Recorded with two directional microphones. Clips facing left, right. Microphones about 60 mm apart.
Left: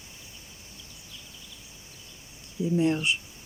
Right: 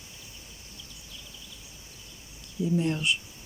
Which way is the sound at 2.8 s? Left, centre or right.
Left.